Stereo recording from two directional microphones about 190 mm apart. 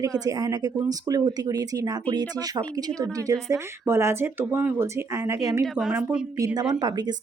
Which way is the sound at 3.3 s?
Centre (ahead or behind).